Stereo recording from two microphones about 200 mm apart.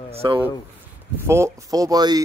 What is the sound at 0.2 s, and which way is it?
A man's voice, 20° right (ahead or behind).